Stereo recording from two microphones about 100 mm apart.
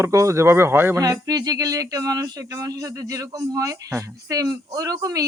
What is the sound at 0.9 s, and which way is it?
Speech, 35° right (ahead or behind).